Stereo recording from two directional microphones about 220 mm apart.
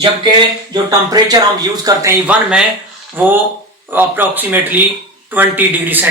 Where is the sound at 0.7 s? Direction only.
15° right (ahead or behind).